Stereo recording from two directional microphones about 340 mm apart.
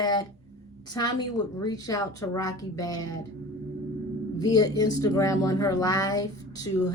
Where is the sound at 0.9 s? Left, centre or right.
Centre.